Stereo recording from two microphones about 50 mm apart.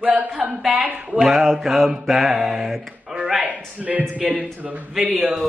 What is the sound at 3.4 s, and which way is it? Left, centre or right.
Speech, right.